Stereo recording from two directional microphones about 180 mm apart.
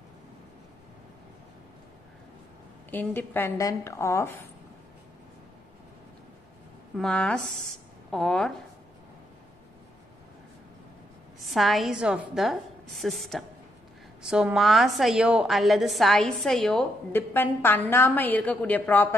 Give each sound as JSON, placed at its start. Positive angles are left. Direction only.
{"t": 2.9, "sound": "a woman's voice", "side_deg": 10}
{"t": 7.0, "sound": "a woman's voice", "side_deg": 5}
{"t": 11.4, "sound": "a woman's voice", "side_deg": 0}